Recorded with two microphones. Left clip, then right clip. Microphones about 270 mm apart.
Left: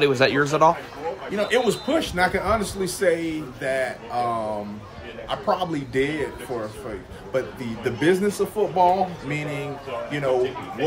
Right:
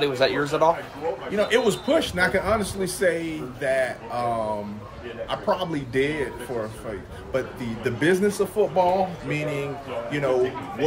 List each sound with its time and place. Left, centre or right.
0.0 s speech: left
1.3 s a man's voice: centre
5.3 s a man's voice: centre
7.3 s a man's voice: centre